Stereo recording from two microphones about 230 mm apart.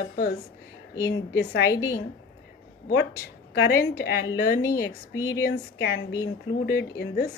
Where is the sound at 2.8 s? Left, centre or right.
Left.